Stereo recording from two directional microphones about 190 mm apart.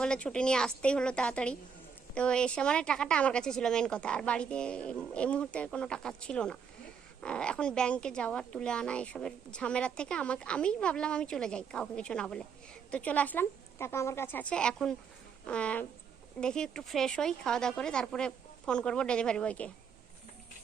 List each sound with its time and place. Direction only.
0.0 s a woman's voice: 5° left (ahead or behind)